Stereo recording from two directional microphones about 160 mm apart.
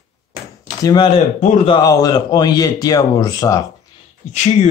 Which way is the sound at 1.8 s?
25° left (ahead or behind).